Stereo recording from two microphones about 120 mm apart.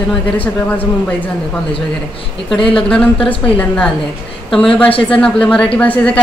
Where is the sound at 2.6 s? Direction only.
5° left (ahead or behind).